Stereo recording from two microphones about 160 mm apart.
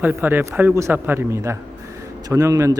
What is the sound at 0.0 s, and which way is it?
Speech, 10° right (ahead or behind).